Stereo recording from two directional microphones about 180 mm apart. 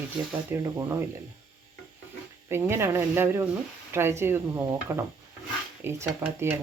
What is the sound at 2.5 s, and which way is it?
Speech, 15° right (ahead or behind).